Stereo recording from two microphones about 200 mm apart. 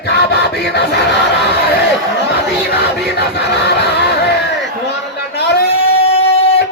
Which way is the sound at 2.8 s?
55° left (ahead or behind).